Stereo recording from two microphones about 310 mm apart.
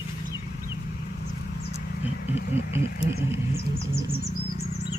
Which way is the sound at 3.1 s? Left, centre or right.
Left.